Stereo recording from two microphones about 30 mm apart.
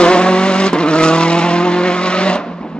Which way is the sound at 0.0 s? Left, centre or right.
Left.